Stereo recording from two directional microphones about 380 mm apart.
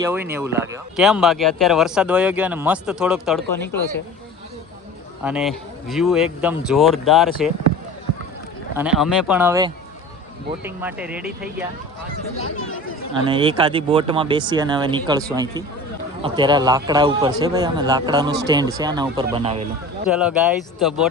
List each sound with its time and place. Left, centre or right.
0.0 s speech: centre
5.2 s speech: centre
8.7 s speech: centre
12.5 s speech: left
13.2 s speech: centre
20.1 s speech: centre